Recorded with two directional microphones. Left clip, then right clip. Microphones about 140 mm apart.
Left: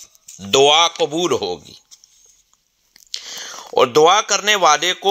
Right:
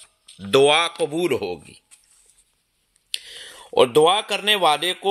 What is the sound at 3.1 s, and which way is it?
Whispering, 15° right (ahead or behind).